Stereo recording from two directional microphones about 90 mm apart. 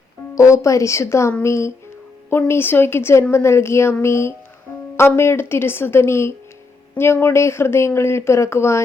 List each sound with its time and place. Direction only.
0.3 s speech: 35° left (ahead or behind)